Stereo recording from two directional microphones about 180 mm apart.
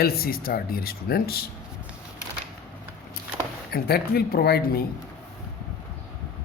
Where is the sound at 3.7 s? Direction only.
60° left (ahead or behind).